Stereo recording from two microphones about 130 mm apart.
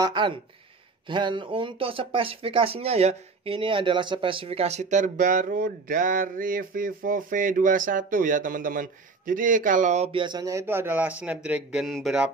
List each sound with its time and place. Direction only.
0.0 s speech: 35° right (ahead or behind); by 10.1 s 65° right (ahead or behind)
10.1 s a man's voice: 35° right (ahead or behind); by 12.3 s centre (ahead or behind)